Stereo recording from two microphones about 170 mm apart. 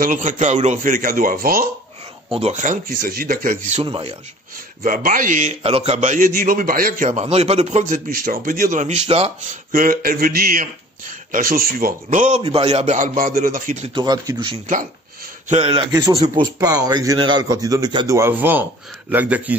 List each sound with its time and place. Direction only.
0.0 s a man's voice: 50° right (ahead or behind)
2.3 s a man's voice: 40° right (ahead or behind)
3.8 s a man's voice: 30° right (ahead or behind)
4.8 s a man's voice: 55° right (ahead or behind)
7.1 s a man's voice: 40° right (ahead or behind)
8.1 s a man's voice: 60° right (ahead or behind); by 9.3 s 35° right (ahead or behind)
9.7 s a man's voice: 55° right (ahead or behind)
13.9 s a man's voice: 20° right (ahead or behind)
15.4 s a man's voice: 35° right (ahead or behind)
15.9 s a man's voice: 20° right (ahead or behind)